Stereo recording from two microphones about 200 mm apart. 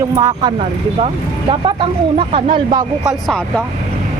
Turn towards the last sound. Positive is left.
turn(degrees=0)  # may be behind; listen again after turning